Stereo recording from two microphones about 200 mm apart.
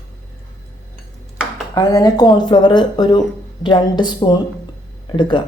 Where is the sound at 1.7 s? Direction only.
20° left (ahead or behind).